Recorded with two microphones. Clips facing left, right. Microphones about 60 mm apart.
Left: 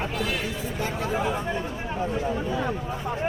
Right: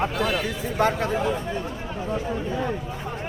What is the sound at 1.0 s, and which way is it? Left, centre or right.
Speech, centre.